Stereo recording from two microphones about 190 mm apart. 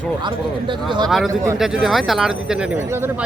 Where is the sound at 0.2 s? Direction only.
25° right (ahead or behind).